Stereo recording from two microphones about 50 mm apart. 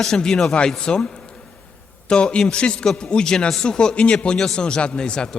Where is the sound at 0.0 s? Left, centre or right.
Centre.